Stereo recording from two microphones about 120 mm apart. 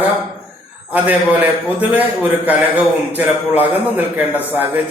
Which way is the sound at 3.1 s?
15° right (ahead or behind).